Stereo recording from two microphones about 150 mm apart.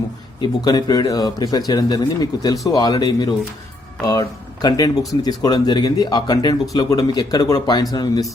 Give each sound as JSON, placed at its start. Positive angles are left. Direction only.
{"t": 0.4, "sound": "speech", "side_deg": 25}